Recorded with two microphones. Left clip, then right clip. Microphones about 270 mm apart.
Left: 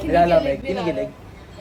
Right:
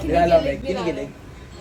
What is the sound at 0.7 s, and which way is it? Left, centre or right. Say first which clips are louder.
Speech: left 1 dB; centre.